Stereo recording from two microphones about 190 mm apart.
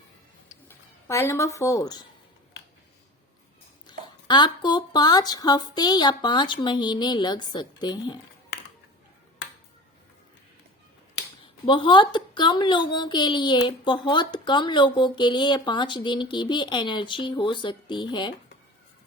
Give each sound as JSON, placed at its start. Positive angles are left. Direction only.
{"t": 0.7, "sound": "speech", "side_deg": 15}
{"t": 3.8, "sound": "a woman's voice", "side_deg": 25}
{"t": 11.6, "sound": "a woman's voice", "side_deg": 25}